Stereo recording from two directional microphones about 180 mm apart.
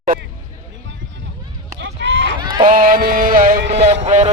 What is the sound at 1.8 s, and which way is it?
Run, 80° right.